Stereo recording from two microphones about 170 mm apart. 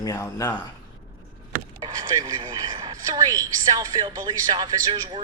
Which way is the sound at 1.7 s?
25° right (ahead or behind).